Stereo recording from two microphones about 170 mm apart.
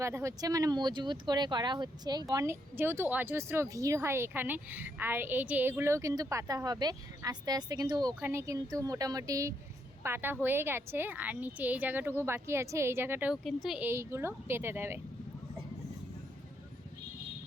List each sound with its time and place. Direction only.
0.0 s a woman's voice: 15° right (ahead or behind)